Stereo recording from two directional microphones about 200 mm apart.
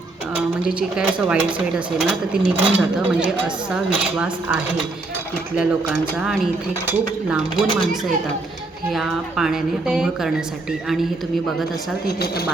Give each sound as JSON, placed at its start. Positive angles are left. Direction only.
{"t": 0.6, "sound": "speech", "side_deg": -5}
{"t": 8.9, "sound": "speech", "side_deg": 0}
{"t": 12.0, "sound": "a woman's voice", "side_deg": 50}